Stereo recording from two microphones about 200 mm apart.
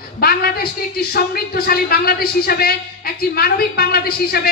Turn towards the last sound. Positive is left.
turn(degrees=50)  # may be behind; listen again after turning